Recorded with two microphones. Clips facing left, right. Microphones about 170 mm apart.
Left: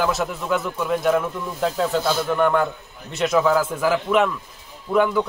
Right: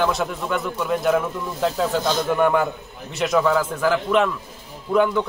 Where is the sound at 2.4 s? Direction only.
10° right (ahead or behind).